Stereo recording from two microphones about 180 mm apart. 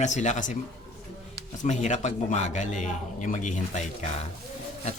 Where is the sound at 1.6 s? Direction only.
40° left (ahead or behind).